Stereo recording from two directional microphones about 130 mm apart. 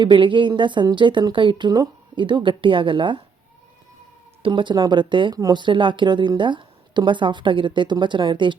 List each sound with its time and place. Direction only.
0.0 s speech: 40° right (ahead or behind)
4.4 s speech: 40° right (ahead or behind)